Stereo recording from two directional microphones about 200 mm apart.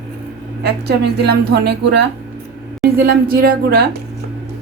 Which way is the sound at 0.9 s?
55° right (ahead or behind).